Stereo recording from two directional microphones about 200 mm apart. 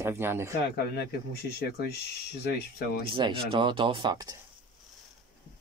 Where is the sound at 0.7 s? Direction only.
50° left (ahead or behind).